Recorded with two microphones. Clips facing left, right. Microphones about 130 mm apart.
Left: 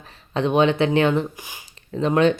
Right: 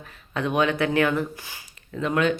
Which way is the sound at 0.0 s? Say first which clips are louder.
Left 5 dB; 25° left (ahead or behind).